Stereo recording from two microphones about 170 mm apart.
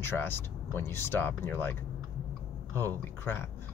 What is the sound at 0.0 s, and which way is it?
Speech, 15° left (ahead or behind).